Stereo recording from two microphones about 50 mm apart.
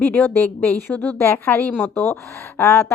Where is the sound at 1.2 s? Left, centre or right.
Left.